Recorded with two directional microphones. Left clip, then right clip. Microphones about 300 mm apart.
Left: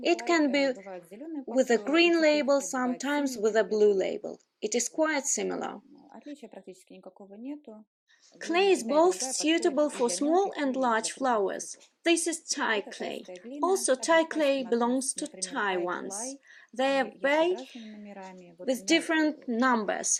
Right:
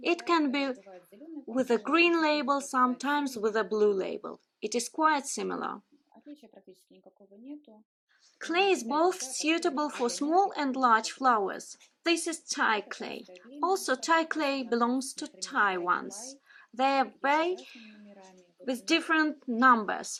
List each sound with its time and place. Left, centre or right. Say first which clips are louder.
0.0 s a woman's voice: left 2 dB; centre
1.7 s a woman's voice: even; centre
6.3 s speech: left 6 dB; left
8.4 s a woman's voice: left 2 dB; centre